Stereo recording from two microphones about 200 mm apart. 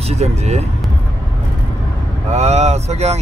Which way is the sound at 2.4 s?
35° right (ahead or behind).